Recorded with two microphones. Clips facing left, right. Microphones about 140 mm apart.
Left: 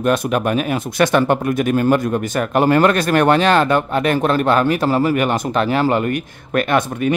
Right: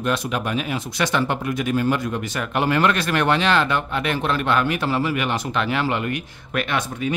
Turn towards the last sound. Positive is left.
turn(degrees=50)  # may be behind; listen again after turning